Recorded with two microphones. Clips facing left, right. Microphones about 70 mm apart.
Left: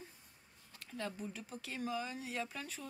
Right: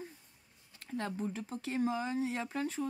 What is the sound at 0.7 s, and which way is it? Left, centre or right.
Speech, right.